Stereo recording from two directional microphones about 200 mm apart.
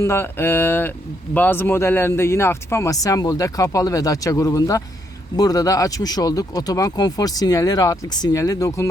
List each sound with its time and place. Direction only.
0.0 s speech: 10° left (ahead or behind)